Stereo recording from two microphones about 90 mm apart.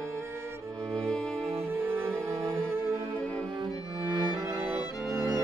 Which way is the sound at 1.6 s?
25° right (ahead or behind).